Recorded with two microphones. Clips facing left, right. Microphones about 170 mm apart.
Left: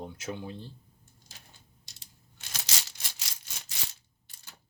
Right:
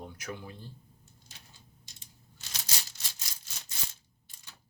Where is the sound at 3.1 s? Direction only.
90° left.